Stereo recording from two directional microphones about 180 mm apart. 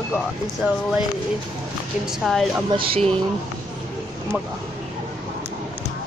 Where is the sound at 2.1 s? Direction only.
Centre (ahead or behind).